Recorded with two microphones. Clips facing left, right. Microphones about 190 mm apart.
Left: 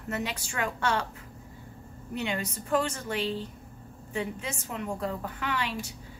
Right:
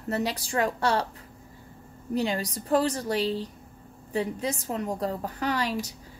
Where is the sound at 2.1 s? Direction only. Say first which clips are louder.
Right 5 dB; 35° right (ahead or behind).